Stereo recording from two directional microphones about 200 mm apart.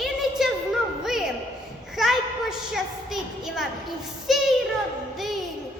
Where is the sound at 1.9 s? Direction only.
Centre (ahead or behind).